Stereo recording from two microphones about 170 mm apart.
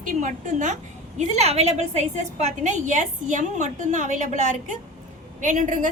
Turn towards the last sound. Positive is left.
turn(degrees=-45)  # may be behind; listen again after turning